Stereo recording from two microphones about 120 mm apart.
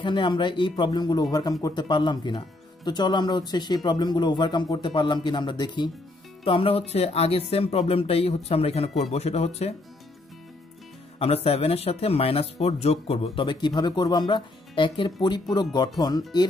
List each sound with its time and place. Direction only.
0.0 s speech: 40° left (ahead or behind)
6.4 s speech: 50° left (ahead or behind)
11.1 s speech: 55° left (ahead or behind); by 16.3 s 35° left (ahead or behind)